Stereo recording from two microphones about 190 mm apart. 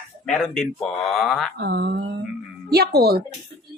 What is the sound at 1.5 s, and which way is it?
A woman's voice, 60° right (ahead or behind).